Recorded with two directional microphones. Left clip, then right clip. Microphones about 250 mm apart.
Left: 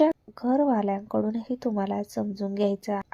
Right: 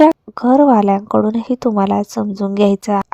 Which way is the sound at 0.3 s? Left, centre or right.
Right.